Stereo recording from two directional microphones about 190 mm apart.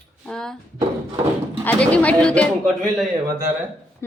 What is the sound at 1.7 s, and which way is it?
Speech, 5° left (ahead or behind).